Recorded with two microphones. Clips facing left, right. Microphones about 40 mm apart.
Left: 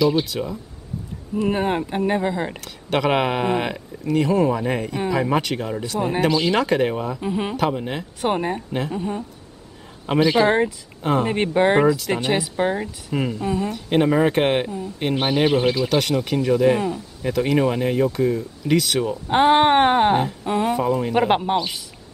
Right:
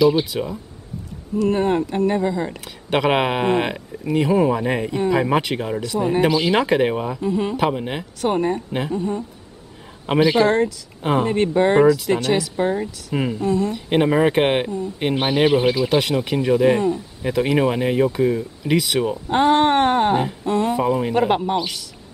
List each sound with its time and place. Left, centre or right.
0.0 s speech: centre
1.4 s speech: centre
2.6 s speech: centre
7.2 s speech: left
7.5 s speech: centre
8.2 s speech: centre
10.0 s speech: centre
11.2 s speech: centre
13.1 s speech: centre
13.4 s speech: left
13.7 s speech: centre
19.2 s speech: left
20.7 s speech: centre
21.3 s speech: left